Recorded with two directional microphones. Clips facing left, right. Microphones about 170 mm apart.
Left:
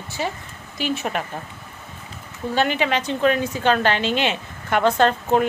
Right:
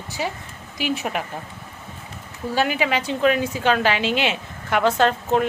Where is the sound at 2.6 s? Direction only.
5° right (ahead or behind).